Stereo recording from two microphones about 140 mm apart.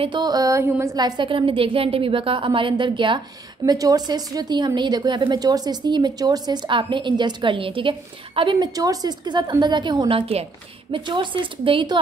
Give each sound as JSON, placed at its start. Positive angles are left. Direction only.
{"t": 0.0, "sound": "a woman's voice", "side_deg": -35}